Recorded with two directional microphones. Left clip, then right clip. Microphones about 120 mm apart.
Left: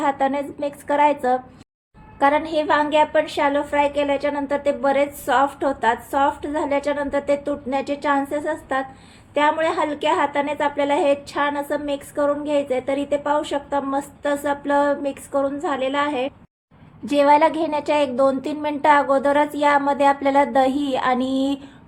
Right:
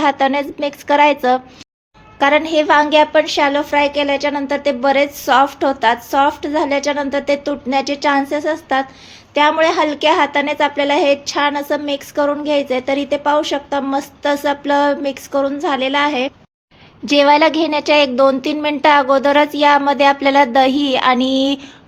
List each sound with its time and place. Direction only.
0.0 s a woman's voice: 30° right (ahead or behind)
17.1 s a woman's voice: 30° right (ahead or behind)